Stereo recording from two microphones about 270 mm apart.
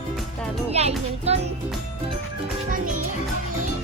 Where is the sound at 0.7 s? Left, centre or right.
Right.